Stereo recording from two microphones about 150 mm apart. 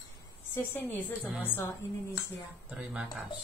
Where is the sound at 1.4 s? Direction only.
15° left (ahead or behind).